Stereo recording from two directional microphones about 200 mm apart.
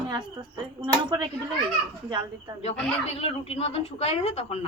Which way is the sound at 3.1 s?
30° left (ahead or behind).